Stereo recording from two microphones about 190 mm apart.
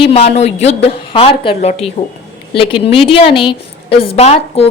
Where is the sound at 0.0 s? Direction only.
35° left (ahead or behind).